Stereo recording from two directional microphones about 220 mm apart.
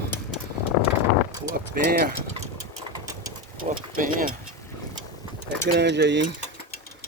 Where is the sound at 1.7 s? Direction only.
45° right (ahead or behind).